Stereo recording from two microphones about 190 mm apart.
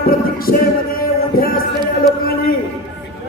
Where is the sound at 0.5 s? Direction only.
50° left (ahead or behind).